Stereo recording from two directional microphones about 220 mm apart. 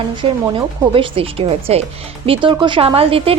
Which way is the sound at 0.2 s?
25° right (ahead or behind).